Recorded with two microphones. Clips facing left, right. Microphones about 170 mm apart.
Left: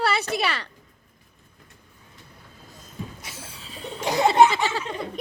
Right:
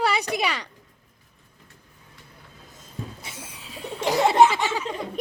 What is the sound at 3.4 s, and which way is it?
Laughter, 15° right (ahead or behind).